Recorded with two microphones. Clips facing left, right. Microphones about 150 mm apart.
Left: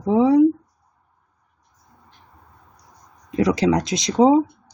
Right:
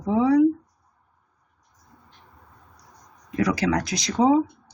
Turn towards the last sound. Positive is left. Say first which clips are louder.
# left 4 dB
turn(degrees=25)  # may be behind; listen again after turning